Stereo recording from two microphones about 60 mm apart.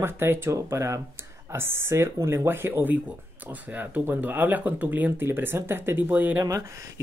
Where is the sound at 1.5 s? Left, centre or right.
Right.